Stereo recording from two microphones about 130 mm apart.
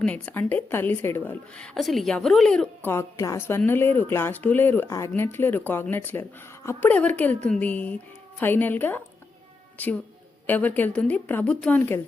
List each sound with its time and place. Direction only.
0.0 s a woman's voice: 10° left (ahead or behind)
2.8 s a woman's voice: 20° left (ahead or behind)